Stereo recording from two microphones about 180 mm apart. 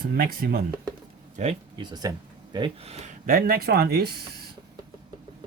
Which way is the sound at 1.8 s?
20° right (ahead or behind).